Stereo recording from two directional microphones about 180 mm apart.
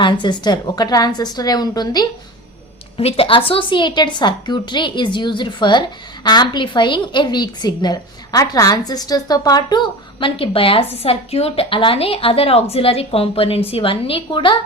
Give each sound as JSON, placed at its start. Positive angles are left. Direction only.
{"t": 0.0, "sound": "a woman's voice", "side_deg": 25}
{"t": 3.0, "sound": "a woman's voice", "side_deg": 35}